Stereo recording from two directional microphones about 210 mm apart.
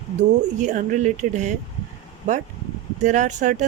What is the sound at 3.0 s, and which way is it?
Speech, 35° right (ahead or behind).